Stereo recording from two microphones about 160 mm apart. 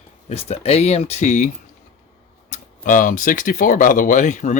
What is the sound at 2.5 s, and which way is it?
Speech, 55° left (ahead or behind).